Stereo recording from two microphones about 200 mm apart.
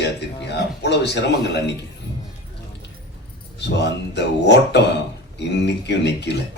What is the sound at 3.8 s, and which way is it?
A man's voice, 60° left (ahead or behind).